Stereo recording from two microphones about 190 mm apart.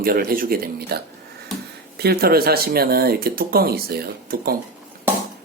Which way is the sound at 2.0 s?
55° right (ahead or behind).